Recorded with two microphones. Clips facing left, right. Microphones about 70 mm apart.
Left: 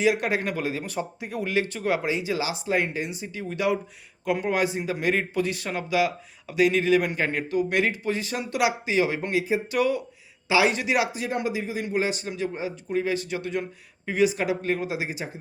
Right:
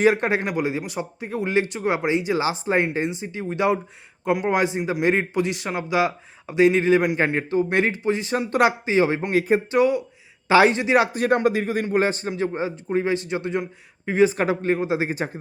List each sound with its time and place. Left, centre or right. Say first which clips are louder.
0.0 s a man's voice: right 4 dB; right
10.5 s a man's voice: right 6 dB; right